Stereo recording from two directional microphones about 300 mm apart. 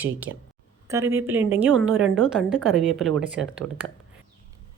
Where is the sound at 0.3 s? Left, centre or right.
Right.